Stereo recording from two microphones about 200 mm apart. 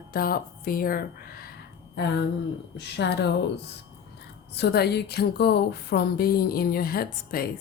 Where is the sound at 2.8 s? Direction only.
60° left (ahead or behind).